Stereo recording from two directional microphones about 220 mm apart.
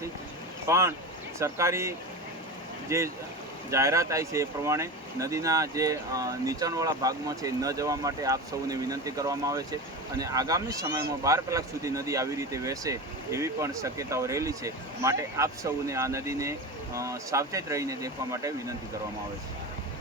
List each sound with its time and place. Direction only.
0.7 s speech: 15° right (ahead or behind)